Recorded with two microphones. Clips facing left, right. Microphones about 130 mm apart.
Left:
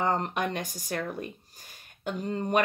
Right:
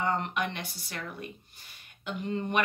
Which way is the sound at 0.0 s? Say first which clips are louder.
Left 2 dB; 40° left (ahead or behind).